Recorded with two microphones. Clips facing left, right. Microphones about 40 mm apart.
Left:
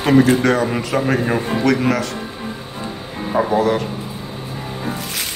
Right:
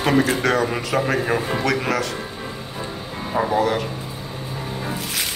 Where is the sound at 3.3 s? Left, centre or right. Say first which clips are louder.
Left 3 dB; centre.